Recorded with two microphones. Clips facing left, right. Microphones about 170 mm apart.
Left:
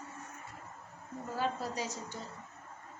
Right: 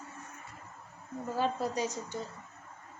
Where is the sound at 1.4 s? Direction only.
20° right (ahead or behind).